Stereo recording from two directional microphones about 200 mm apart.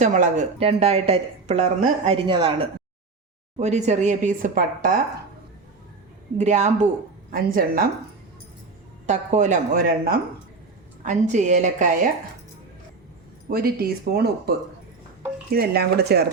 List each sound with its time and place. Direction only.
0.0 s speech: 35° right (ahead or behind)
6.3 s speech: 35° right (ahead or behind)
7.3 s speech: 45° right (ahead or behind)
9.0 s speech: 35° right (ahead or behind)
13.5 s speech: 50° right (ahead or behind)
15.5 s speech: 50° right (ahead or behind)